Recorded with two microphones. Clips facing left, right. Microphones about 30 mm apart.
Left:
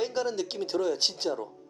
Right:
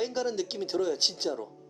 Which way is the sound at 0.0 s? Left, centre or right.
Centre.